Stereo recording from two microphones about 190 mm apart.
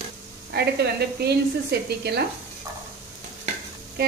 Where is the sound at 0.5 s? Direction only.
55° right (ahead or behind).